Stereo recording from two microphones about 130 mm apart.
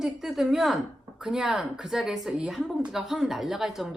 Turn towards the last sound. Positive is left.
turn(degrees=0)  # may be behind; listen again after turning